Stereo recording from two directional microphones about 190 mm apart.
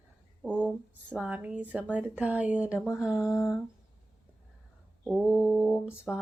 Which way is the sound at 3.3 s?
15° left (ahead or behind).